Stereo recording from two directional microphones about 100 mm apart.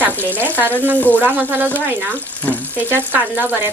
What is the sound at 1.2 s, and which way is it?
Speech, 20° right (ahead or behind).